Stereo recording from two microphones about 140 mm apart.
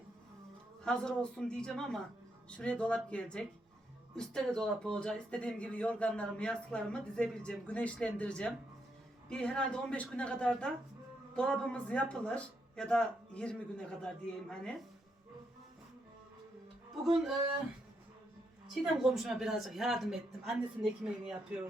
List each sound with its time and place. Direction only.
0.9 s speech: 5° left (ahead or behind)
17.0 s speech: centre (ahead or behind)
18.7 s speech: centre (ahead or behind)